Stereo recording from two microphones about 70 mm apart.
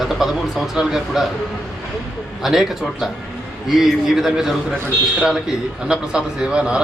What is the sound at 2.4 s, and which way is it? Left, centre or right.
A man's voice, centre.